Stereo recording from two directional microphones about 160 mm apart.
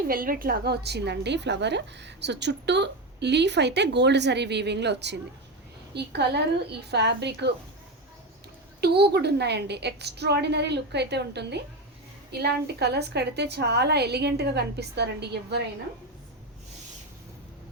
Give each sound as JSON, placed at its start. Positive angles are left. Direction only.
{"t": 0.1, "sound": "a woman's voice", "side_deg": -60}
{"t": 8.8, "sound": "a woman's voice", "side_deg": -90}